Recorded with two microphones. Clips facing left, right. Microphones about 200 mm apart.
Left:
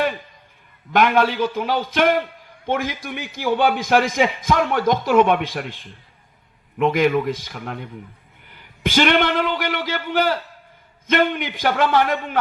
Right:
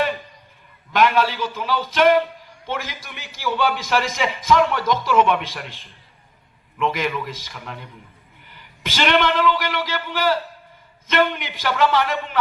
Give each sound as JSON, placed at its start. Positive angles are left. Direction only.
{"t": 0.9, "sound": "a man's voice", "side_deg": 50}